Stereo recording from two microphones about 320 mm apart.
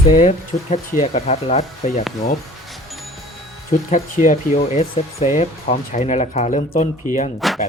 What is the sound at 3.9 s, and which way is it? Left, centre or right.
Speech, left.